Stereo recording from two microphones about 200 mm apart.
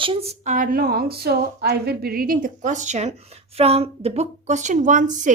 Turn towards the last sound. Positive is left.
turn(degrees=-40)  # may be behind; listen again after turning